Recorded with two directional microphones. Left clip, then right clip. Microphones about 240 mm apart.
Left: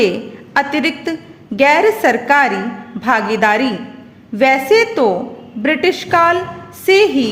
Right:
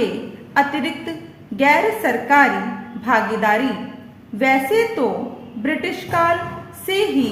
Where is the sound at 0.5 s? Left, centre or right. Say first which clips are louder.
Left 3 dB; left.